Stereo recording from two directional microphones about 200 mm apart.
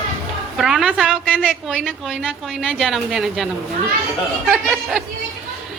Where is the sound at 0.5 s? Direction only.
Centre (ahead or behind).